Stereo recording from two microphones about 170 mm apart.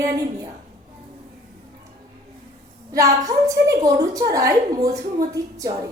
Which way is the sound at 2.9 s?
20° right (ahead or behind).